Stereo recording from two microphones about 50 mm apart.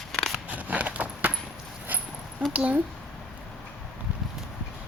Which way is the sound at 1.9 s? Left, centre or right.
Right.